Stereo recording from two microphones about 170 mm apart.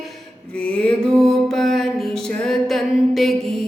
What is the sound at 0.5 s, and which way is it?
Music, 5° left (ahead or behind).